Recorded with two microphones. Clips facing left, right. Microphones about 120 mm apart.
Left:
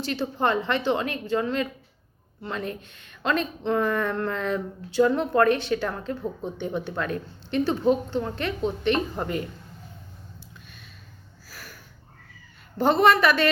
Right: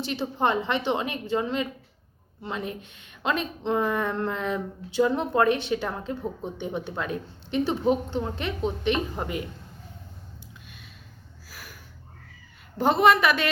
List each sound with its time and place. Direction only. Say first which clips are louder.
0.0 s a woman's voice: even; 20° right (ahead or behind)
11.4 s a sound: left 1 dB; 5° right (ahead or behind)
12.8 s a woman's voice: left 1 dB; 10° right (ahead or behind)